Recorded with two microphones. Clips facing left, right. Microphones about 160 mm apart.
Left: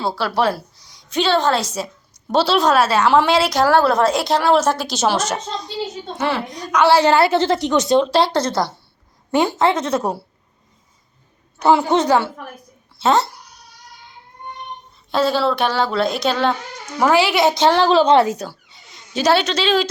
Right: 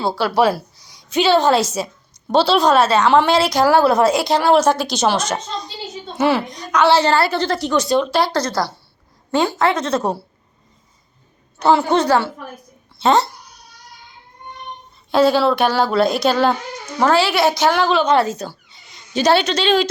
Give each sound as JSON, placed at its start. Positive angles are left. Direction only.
{"t": 0.2, "sound": "a woman's voice", "side_deg": -5}
{"t": 6.1, "sound": "a woman's voice", "side_deg": -5}
{"t": 6.5, "sound": "a woman's voice", "side_deg": 10}
{"t": 11.6, "sound": "a woman's voice", "side_deg": 15}
{"t": 13.0, "sound": "speech", "side_deg": 5}
{"t": 15.1, "sound": "a woman's voice", "side_deg": 0}
{"t": 17.0, "sound": "a woman's voice", "side_deg": 15}
{"t": 18.2, "sound": "a woman's voice", "side_deg": 15}
{"t": 19.1, "sound": "a woman's voice", "side_deg": 0}